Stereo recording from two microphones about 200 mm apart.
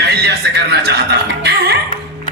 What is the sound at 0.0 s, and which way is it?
Chuckle, 55° right (ahead or behind).